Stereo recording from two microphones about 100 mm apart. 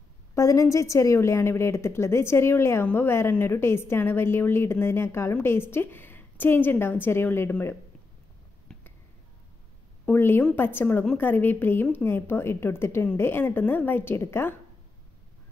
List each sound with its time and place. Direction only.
0.3 s a woman's voice: 30° left (ahead or behind)
8.7 s a sound: 5° left (ahead or behind)
10.0 s a woman's voice: 20° left (ahead or behind)